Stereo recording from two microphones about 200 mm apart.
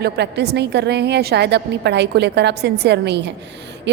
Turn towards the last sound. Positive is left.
turn(degrees=-60)  # may be behind; listen again after turning